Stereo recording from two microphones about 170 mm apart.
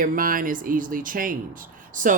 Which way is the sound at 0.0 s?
55° right (ahead or behind).